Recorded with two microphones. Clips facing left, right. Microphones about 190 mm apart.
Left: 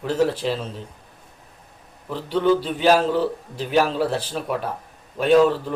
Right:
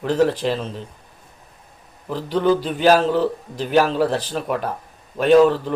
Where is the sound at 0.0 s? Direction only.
5° left (ahead or behind).